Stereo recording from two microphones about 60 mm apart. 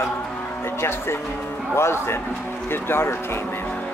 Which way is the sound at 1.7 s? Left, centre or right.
Left.